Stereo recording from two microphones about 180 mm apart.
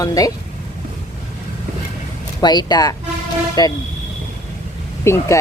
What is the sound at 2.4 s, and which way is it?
Speech, 25° left (ahead or behind).